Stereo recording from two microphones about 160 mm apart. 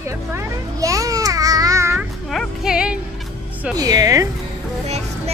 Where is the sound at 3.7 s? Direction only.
25° right (ahead or behind).